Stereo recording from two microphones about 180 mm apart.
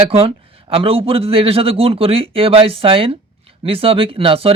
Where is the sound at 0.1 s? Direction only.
35° right (ahead or behind).